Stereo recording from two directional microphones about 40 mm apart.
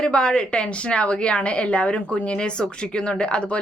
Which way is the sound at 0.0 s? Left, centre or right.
Left.